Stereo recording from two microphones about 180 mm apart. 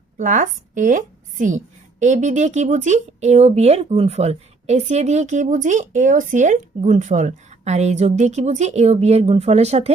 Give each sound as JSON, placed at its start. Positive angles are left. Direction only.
{"t": 0.2, "sound": "a woman's voice", "side_deg": -45}